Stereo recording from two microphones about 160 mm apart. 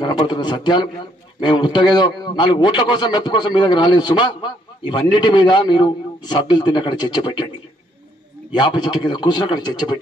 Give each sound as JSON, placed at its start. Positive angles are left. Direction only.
{"t": 0.0, "sound": "a man's voice", "side_deg": 25}
{"t": 8.7, "sound": "a man's voice", "side_deg": 30}